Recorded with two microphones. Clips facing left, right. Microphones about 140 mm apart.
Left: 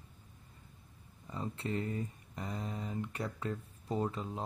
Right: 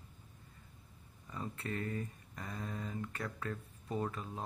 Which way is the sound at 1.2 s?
25° left (ahead or behind).